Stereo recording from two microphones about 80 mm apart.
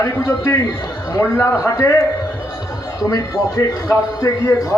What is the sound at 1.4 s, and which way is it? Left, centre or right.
Speech, left.